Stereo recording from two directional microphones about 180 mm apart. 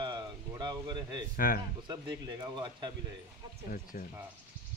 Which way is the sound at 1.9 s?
20° right (ahead or behind).